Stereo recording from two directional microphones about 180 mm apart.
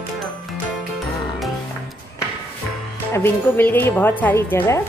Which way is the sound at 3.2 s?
10° left (ahead or behind).